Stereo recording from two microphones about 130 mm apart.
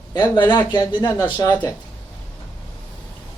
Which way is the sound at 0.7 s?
35° left (ahead or behind).